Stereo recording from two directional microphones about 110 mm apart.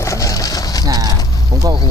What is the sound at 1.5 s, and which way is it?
Speech, 40° right (ahead or behind).